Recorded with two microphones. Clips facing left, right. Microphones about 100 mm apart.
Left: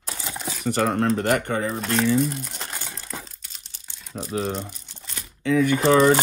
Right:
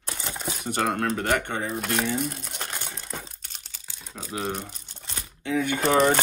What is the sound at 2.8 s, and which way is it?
Crumpling, 15° right (ahead or behind).